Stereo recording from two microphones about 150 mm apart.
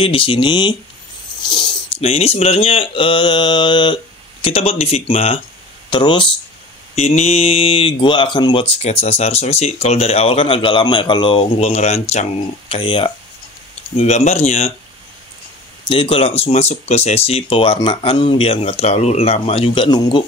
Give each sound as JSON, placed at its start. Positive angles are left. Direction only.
{"t": 0.0, "sound": "speech", "side_deg": 35}
{"t": 1.4, "sound": "a sound", "side_deg": 30}
{"t": 2.0, "sound": "speech", "side_deg": 40}
{"t": 7.0, "sound": "speech", "side_deg": 40}
{"t": 13.9, "sound": "speech", "side_deg": 45}
{"t": 15.9, "sound": "speech", "side_deg": 35}